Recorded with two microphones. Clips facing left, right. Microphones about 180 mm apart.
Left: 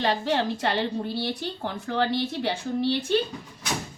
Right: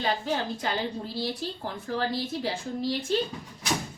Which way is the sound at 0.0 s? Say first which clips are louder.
Left 4 dB; 75° left (ahead or behind).